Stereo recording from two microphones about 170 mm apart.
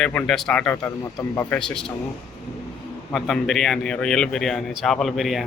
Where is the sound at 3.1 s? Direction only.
Centre (ahead or behind).